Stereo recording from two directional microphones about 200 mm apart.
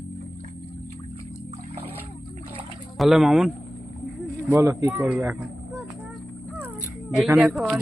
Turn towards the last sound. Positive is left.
turn(degrees=-5)  # may be behind; listen again after turning